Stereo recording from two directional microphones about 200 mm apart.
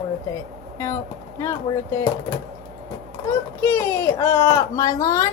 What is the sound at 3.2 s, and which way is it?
A woman's voice, 10° left (ahead or behind).